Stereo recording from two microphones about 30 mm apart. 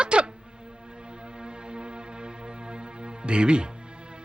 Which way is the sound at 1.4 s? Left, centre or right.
Right.